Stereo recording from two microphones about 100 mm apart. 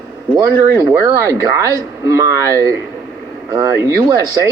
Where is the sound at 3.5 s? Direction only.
30° right (ahead or behind).